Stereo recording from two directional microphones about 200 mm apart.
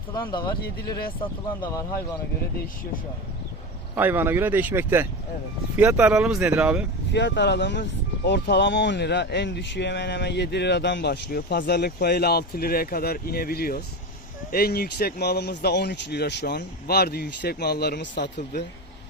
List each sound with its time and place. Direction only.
0.1 s speech: 20° left (ahead or behind)
3.9 s speech: 10° right (ahead or behind)
7.1 s speech: 60° left (ahead or behind)